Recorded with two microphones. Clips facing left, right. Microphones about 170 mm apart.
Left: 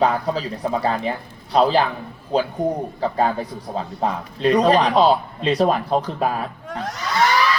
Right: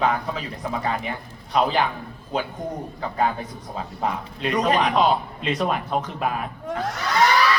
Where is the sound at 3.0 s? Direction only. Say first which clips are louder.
Left 3 dB; 35° left (ahead or behind).